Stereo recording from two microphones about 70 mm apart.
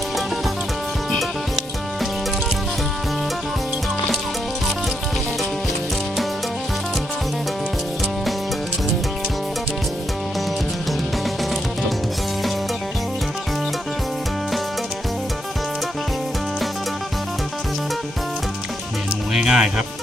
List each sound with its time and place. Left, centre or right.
19.3 s music: centre